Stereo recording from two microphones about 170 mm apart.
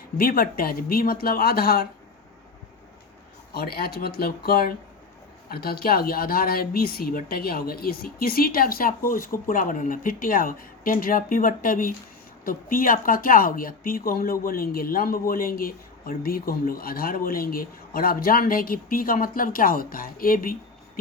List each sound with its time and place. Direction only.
0.2 s a woman's voice: 60° left (ahead or behind)
3.5 s a woman's voice: 65° left (ahead or behind)